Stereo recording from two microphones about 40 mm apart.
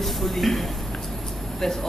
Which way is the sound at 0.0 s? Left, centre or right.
Centre.